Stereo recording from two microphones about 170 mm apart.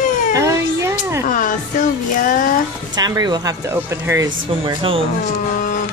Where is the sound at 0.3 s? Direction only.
15° right (ahead or behind).